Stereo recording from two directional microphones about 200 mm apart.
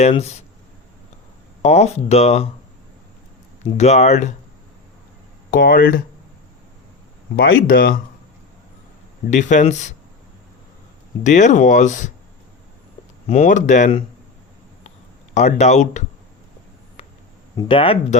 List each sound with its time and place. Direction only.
0.0 s speech: 30° left (ahead or behind)
1.6 s speech: 35° left (ahead or behind)
3.6 s speech: 35° left (ahead or behind)
5.5 s speech: 45° left (ahead or behind)
7.7 s speech: 50° left (ahead or behind)
9.3 s speech: 35° left (ahead or behind)
11.2 s speech: 35° left (ahead or behind)
13.2 s speech: 35° left (ahead or behind)
15.4 s speech: 35° left (ahead or behind)
17.6 s speech: 25° left (ahead or behind)